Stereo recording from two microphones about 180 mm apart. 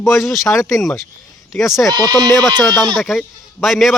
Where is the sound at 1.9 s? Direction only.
20° right (ahead or behind).